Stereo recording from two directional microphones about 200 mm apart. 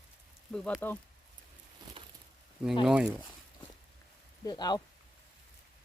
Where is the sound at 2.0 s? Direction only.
25° right (ahead or behind).